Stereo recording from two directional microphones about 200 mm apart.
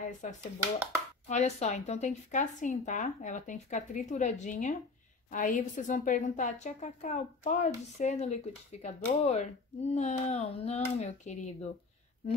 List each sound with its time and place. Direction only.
0.2 s speech: 35° left (ahead or behind)